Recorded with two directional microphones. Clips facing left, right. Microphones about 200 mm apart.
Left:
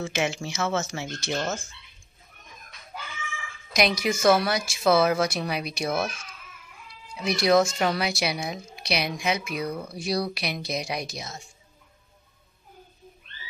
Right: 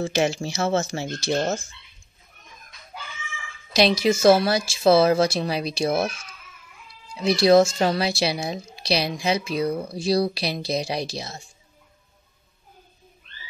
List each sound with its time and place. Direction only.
0.0 s a woman's voice: 35° right (ahead or behind)
3.7 s speech: 30° right (ahead or behind)
7.2 s a woman's voice: 30° right (ahead or behind)